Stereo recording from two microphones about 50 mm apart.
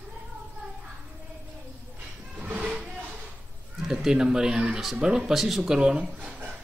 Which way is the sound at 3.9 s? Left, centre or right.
Centre.